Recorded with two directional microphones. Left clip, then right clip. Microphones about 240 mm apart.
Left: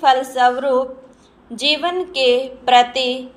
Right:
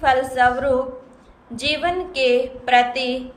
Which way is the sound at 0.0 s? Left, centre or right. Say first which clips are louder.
Left 3 dB; centre.